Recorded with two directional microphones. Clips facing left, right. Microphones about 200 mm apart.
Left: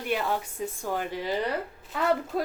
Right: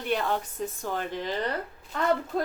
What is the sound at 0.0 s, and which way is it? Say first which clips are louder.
A child's voice: right 1 dB; 5° left (ahead or behind).